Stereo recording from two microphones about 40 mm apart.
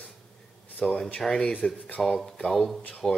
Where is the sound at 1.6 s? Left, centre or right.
Left.